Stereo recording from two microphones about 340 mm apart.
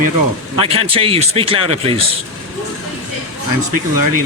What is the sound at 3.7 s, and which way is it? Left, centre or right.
Speech, right.